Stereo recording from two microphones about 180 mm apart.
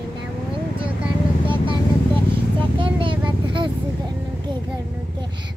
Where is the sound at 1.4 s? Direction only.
30° right (ahead or behind).